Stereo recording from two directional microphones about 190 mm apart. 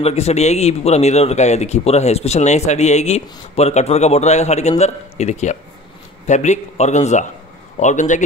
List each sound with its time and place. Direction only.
0.0 s speech: 35° left (ahead or behind)